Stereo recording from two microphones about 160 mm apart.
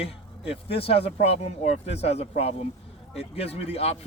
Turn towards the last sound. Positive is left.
turn(degrees=40)  # may be behind; listen again after turning